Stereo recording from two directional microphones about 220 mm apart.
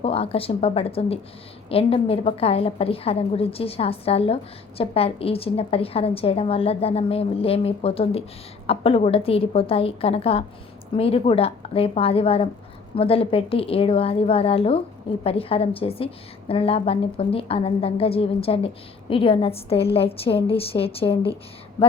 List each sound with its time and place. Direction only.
0.0 s a woman's voice: 25° left (ahead or behind)